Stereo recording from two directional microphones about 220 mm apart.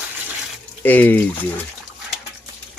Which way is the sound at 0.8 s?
10° left (ahead or behind).